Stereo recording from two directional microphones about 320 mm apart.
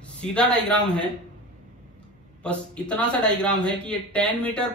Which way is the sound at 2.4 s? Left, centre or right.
Centre.